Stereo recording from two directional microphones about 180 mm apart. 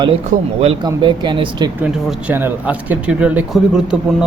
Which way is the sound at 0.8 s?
25° right (ahead or behind).